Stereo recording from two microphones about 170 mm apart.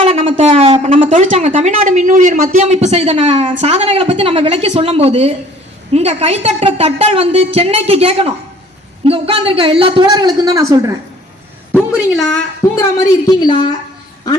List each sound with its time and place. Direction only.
0.0 s a woman's voice: 40° right (ahead or behind)
1.1 s a man's voice: 45° right (ahead or behind); by 10.9 s 20° right (ahead or behind)
11.7 s a woman's voice: 5° right (ahead or behind)
12.6 s a man's voice: 20° left (ahead or behind)